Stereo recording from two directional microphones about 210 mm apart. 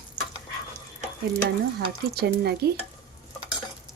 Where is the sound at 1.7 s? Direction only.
50° right (ahead or behind).